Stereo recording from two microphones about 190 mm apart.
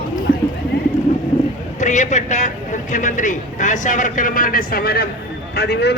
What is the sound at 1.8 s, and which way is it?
A man's voice, 40° left (ahead or behind).